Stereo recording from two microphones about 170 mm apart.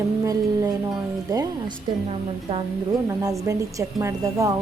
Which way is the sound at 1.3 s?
20° right (ahead or behind).